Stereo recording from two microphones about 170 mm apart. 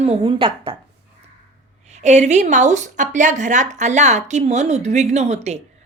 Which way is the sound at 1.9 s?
40° right (ahead or behind).